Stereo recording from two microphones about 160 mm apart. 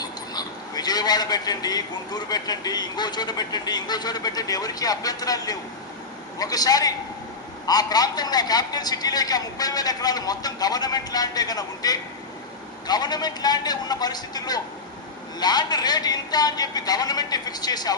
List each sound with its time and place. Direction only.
0.0 s a man's voice: 25° left (ahead or behind)